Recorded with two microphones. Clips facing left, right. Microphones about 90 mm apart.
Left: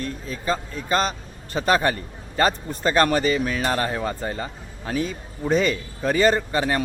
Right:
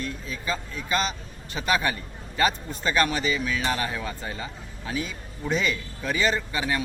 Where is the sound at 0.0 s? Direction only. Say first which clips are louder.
Left 4 dB; 40° left (ahead or behind).